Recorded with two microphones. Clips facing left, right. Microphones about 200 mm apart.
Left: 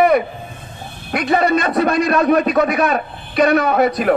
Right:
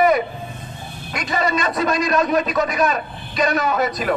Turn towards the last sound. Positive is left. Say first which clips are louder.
# left 5 dB
turn(degrees=60)  # may be behind; listen again after turning